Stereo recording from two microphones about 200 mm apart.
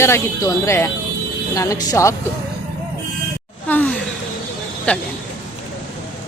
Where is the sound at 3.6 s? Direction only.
10° left (ahead or behind).